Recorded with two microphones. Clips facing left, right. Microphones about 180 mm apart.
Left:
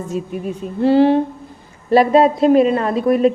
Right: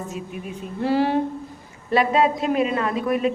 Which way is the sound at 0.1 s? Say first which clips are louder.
Left 8 dB; 30° left (ahead or behind).